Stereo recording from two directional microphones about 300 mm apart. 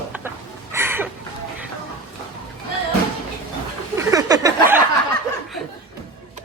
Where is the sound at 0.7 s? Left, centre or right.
Centre.